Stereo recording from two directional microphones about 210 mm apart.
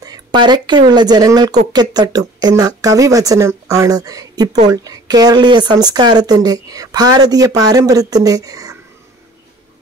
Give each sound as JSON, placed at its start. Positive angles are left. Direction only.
{"t": 0.0, "sound": "speech", "side_deg": -20}